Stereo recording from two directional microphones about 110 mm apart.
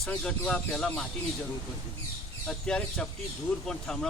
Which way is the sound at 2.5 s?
5° left (ahead or behind).